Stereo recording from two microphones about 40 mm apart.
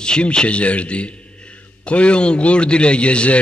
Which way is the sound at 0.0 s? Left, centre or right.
Left.